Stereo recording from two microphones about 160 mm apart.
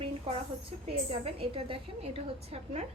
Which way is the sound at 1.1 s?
35° right (ahead or behind).